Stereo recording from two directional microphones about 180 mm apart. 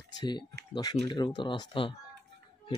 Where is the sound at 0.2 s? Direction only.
25° left (ahead or behind).